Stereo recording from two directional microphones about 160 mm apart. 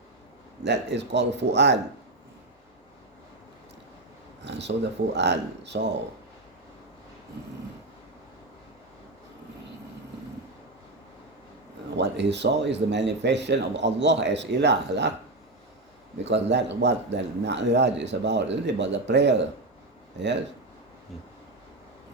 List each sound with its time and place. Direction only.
0.6 s a man's voice: 90° right
4.4 s a sound: 90° right
5.1 s a man's voice: 90° right
11.9 s a man's voice: 90° right
16.2 s a man's voice: 90° right